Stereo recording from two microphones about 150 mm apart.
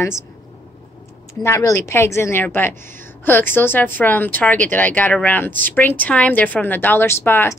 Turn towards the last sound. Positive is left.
turn(degrees=15)  # may be behind; listen again after turning